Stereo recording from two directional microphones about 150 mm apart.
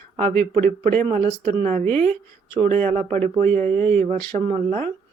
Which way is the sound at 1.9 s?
10° left (ahead or behind).